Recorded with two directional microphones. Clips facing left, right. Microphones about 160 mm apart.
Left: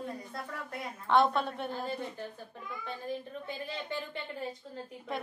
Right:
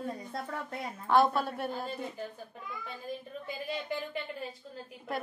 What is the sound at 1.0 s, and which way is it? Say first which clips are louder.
Speech: right 1 dB; 5° right (ahead or behind).